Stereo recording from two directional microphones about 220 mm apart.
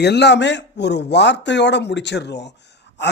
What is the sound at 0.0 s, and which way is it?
Speech, 50° left (ahead or behind).